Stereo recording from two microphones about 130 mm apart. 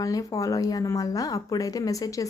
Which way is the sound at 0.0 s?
25° left (ahead or behind).